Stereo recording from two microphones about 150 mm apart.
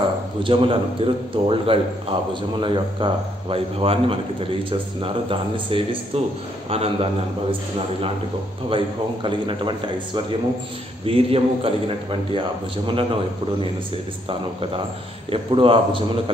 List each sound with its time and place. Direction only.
0.4 s a man's voice: 35° right (ahead or behind)
8.6 s a man's voice: 35° right (ahead or behind)
15.3 s a man's voice: 35° right (ahead or behind)